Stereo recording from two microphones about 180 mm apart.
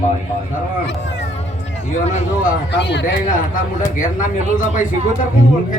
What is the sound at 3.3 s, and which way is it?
A man's voice, 50° left (ahead or behind).